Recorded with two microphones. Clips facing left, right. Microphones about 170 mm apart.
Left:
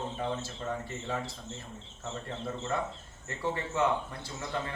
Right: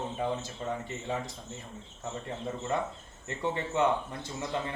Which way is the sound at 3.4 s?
20° right (ahead or behind).